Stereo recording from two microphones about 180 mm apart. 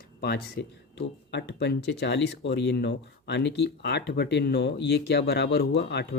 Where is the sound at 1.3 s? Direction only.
70° left (ahead or behind).